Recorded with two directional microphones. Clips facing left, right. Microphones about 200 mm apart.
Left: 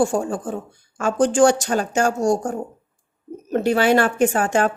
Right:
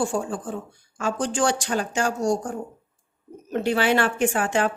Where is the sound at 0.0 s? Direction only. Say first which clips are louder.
Left 5 dB; 45° left (ahead or behind).